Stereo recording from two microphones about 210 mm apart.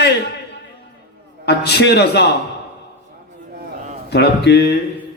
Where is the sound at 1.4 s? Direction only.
55° left (ahead or behind).